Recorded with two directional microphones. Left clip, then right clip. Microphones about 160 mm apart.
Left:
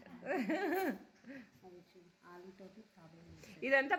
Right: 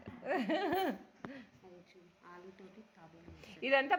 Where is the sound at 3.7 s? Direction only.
30° left (ahead or behind).